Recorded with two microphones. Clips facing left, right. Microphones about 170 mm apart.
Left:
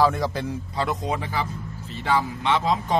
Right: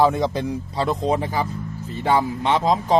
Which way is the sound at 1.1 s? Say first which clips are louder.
Right 5 dB; 40° right (ahead or behind).